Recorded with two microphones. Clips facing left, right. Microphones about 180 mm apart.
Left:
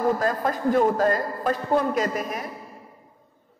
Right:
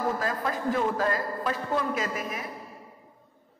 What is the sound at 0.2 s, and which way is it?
A man's voice, 45° left (ahead or behind).